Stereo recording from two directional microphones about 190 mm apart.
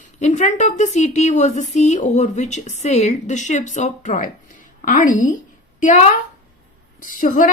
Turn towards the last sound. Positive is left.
turn(degrees=45)  # may be behind; listen again after turning